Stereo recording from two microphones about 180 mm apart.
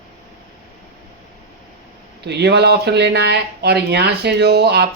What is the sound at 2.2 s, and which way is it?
Speech, 70° right (ahead or behind).